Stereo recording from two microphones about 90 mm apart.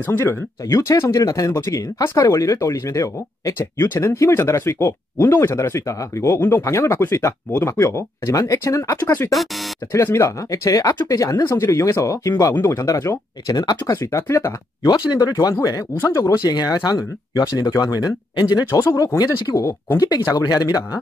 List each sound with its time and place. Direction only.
0.0 s speech: 25° left (ahead or behind); by 13.9 s 45° left (ahead or behind)
14.1 s speech: 30° left (ahead or behind)
15.1 s speech: 45° left (ahead or behind)
15.9 s speech: 25° left (ahead or behind)
16.4 s speech: 50° left (ahead or behind)
18.7 s speech: 40° left (ahead or behind)